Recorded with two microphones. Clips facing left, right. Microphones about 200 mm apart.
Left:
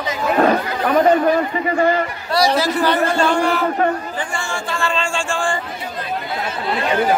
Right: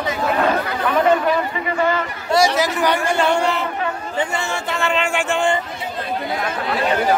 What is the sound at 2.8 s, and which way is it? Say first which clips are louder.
Speech: left 1 dB; 15° right (ahead or behind).